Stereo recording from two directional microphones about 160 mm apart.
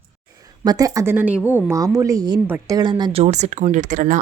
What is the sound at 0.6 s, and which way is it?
A woman's voice, 25° right (ahead or behind).